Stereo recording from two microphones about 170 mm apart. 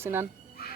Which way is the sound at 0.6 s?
65° left (ahead or behind).